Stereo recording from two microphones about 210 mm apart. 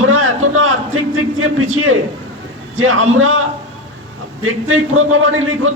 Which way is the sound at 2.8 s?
75° right (ahead or behind).